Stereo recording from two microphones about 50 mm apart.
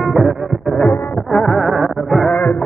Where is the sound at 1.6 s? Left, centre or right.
Centre.